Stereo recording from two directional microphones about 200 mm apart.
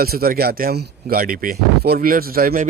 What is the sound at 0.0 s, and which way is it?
Speech, 50° right (ahead or behind).